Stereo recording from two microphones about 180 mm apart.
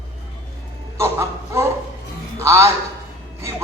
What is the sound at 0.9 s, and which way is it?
A man's voice, 15° right (ahead or behind).